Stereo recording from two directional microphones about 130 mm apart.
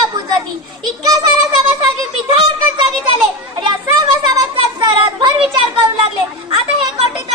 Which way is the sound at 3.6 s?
35° right (ahead or behind).